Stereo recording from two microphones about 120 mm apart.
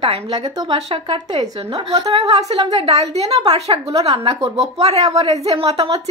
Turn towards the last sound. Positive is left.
turn(degrees=-55)  # may be behind; listen again after turning